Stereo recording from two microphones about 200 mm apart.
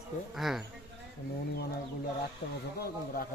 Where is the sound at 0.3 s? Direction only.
Centre (ahead or behind).